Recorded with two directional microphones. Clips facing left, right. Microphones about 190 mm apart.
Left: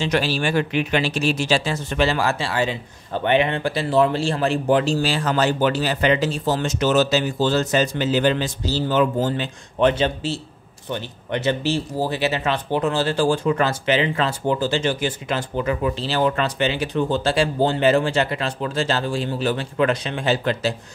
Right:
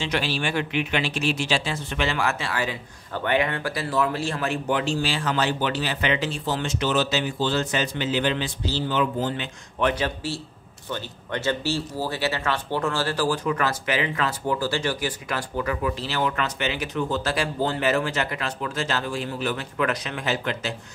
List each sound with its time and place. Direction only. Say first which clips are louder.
0.0 s speech: left 5 dB; 40° left (ahead or behind)